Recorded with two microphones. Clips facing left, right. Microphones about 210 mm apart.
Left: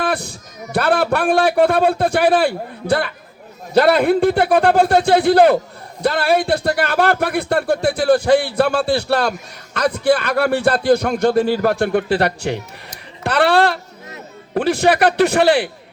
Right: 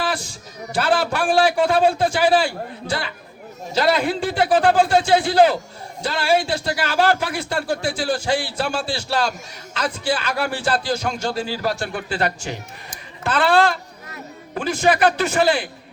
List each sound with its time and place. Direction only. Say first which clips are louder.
0.0 s a man's voice: left 4 dB; 60° left (ahead or behind)